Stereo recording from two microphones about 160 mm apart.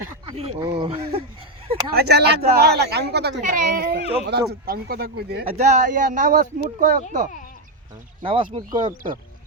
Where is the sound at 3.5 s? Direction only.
60° right (ahead or behind).